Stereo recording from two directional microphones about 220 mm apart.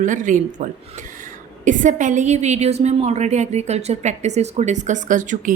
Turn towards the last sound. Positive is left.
turn(degrees=-35)  # may be behind; listen again after turning